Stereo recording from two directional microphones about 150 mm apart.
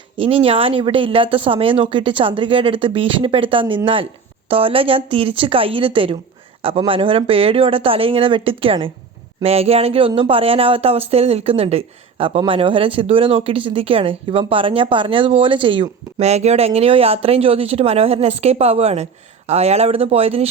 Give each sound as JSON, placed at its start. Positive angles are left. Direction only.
{"t": 0.2, "sound": "speech", "side_deg": -40}